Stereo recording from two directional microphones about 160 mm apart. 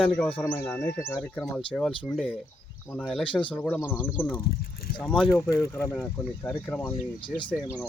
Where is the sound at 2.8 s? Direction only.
10° left (ahead or behind).